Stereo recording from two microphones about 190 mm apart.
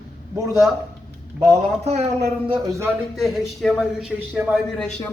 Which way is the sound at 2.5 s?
15° right (ahead or behind).